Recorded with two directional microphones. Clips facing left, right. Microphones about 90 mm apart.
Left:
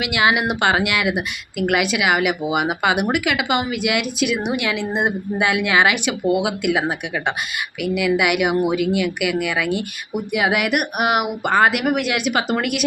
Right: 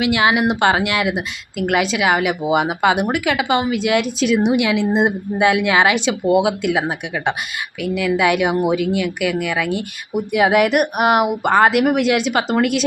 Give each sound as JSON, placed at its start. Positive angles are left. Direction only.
{"t": 0.0, "sound": "speech", "side_deg": -30}
{"t": 4.5, "sound": "speech", "side_deg": -20}